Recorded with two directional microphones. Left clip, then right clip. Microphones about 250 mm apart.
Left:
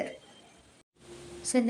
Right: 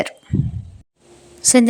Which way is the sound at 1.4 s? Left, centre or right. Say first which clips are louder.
Right 15 dB; right.